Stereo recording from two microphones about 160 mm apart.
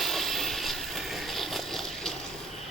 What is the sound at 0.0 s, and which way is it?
Vehicle, centre (ahead or behind).